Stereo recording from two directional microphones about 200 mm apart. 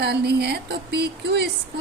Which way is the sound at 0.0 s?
55° right (ahead or behind).